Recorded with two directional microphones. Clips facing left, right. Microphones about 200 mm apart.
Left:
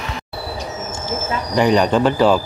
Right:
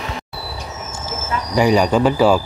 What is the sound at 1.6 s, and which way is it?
Speech, 5° right (ahead or behind).